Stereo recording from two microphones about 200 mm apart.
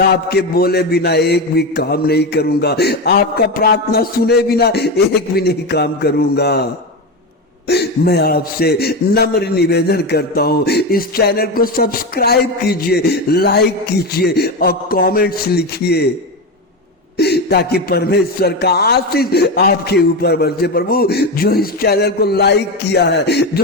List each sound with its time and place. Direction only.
0.0 s a man's voice: 50° left (ahead or behind)
7.7 s a man's voice: 55° left (ahead or behind)
17.2 s a man's voice: 55° left (ahead or behind)